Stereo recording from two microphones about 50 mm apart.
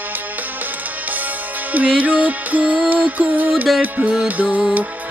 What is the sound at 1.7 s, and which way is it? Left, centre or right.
Music, right.